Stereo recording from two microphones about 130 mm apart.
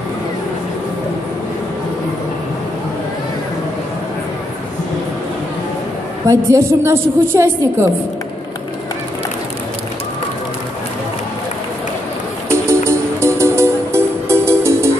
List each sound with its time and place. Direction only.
6.2 s a woman's voice: 20° right (ahead or behind)
12.4 s music: 20° right (ahead or behind)